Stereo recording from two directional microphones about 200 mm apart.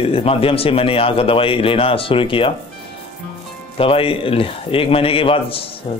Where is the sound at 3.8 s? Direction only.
25° left (ahead or behind).